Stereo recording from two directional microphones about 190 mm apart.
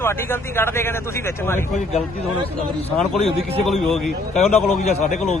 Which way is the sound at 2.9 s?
Centre (ahead or behind).